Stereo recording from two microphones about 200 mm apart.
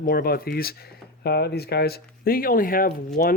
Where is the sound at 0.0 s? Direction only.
50° left (ahead or behind).